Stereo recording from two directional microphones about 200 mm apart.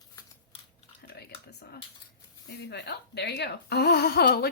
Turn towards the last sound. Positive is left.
turn(degrees=50)  # may be behind; listen again after turning